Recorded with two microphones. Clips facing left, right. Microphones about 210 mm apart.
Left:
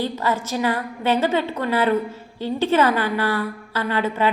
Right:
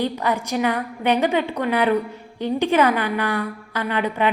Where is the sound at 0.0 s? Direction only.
15° right (ahead or behind).